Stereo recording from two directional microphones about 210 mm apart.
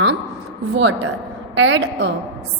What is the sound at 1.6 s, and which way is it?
Speech, 65° right (ahead or behind).